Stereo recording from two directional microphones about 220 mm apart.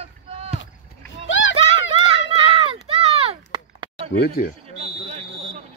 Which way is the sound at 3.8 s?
25° right (ahead or behind).